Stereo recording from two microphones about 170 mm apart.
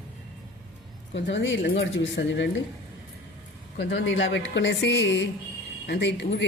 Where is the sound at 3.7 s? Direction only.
90° left.